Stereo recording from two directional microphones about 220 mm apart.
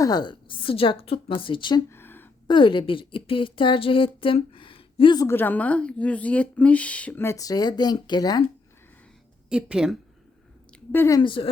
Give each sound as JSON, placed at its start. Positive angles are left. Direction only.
{"t": 0.0, "sound": "a woman's voice", "side_deg": 20}
{"t": 2.5, "sound": "a woman's voice", "side_deg": 20}
{"t": 9.5, "sound": "a woman's voice", "side_deg": -5}
{"t": 10.9, "sound": "a woman's voice", "side_deg": 15}